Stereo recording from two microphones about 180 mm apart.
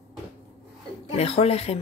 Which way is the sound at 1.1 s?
35° left (ahead or behind).